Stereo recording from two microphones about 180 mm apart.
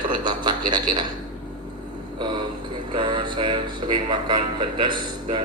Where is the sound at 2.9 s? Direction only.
25° right (ahead or behind).